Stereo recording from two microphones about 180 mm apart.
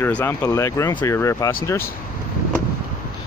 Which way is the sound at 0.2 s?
15° left (ahead or behind).